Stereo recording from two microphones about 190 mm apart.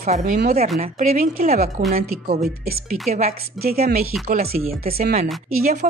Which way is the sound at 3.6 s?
Centre (ahead or behind).